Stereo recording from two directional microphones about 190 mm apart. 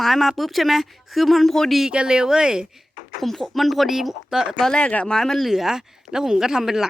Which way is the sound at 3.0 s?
45° left (ahead or behind).